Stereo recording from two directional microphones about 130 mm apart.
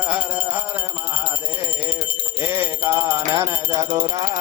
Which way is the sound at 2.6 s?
25° right (ahead or behind).